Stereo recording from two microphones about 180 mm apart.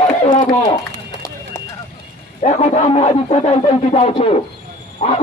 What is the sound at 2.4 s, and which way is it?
Speech, 40° left (ahead or behind).